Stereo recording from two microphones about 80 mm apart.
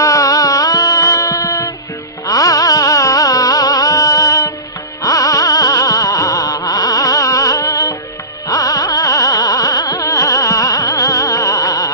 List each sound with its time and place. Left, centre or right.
0.0 s music: left
8.5 s carnatic music: left